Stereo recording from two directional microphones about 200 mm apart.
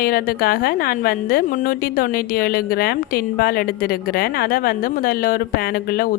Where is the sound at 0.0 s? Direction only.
45° left (ahead or behind).